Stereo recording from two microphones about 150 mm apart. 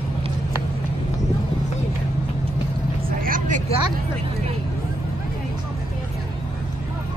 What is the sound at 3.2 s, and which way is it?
Vehicle, 60° right (ahead or behind).